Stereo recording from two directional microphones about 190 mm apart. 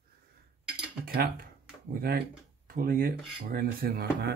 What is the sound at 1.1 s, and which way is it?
Speech, 50° right (ahead or behind).